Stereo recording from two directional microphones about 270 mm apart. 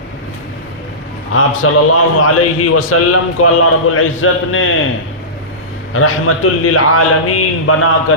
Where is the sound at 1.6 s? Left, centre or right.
Left.